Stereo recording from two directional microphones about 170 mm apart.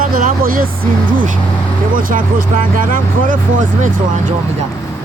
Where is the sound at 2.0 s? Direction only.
55° right (ahead or behind).